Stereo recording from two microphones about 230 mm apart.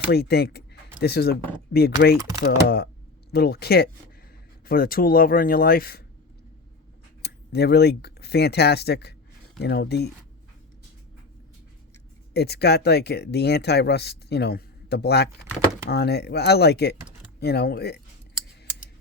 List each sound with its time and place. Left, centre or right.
0.1 s speech: left
7.2 s speech: left
12.3 s speech: left